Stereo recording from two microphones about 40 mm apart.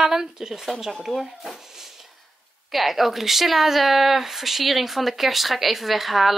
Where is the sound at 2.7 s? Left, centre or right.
Centre.